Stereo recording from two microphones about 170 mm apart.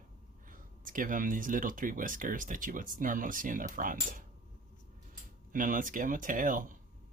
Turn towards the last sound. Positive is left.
turn(degrees=-55)  # may be behind; listen again after turning